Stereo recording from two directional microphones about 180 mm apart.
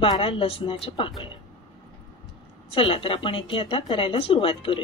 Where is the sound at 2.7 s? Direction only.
30° left (ahead or behind).